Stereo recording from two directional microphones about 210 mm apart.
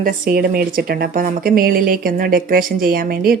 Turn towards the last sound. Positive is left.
turn(degrees=-45)  # may be behind; listen again after turning